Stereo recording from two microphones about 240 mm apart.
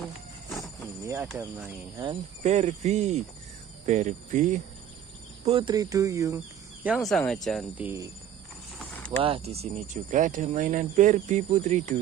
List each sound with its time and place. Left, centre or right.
1.0 s speech: centre
9.2 s speech: right